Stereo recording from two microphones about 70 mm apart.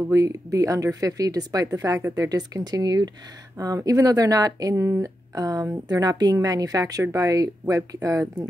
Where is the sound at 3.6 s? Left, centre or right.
Right.